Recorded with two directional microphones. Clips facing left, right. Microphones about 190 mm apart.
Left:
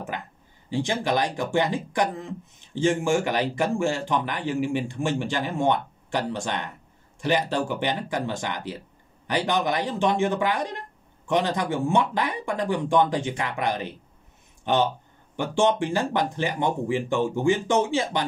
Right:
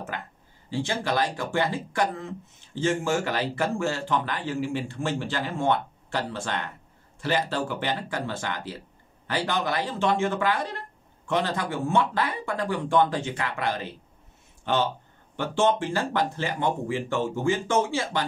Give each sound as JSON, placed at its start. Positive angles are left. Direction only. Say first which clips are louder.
{"t": 0.1, "sound": "speech", "louder": "left 2 dB", "side_deg": 15}